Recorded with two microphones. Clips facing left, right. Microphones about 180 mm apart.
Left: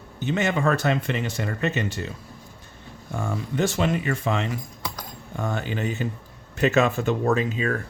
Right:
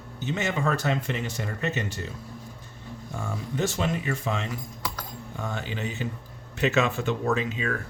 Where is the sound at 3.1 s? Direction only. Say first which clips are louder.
Left 4 dB; 75° left (ahead or behind).